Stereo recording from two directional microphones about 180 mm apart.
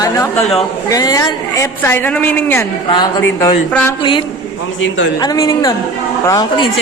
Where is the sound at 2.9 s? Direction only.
25° left (ahead or behind).